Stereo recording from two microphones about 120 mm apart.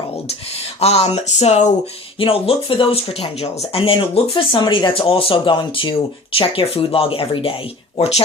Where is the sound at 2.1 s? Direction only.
50° left (ahead or behind).